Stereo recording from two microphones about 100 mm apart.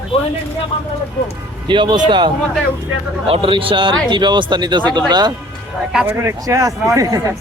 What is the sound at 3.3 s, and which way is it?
A man's voice, 60° right (ahead or behind).